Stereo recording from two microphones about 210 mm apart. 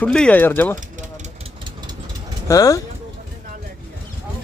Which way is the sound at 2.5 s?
15° left (ahead or behind).